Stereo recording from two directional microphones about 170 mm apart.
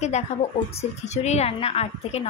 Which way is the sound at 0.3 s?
40° left (ahead or behind).